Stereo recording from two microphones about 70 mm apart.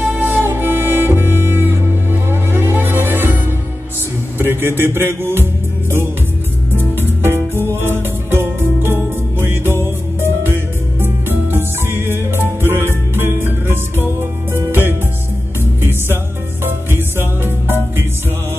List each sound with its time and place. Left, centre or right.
0.0 s music: right
4.4 s music: right
10.2 s music: right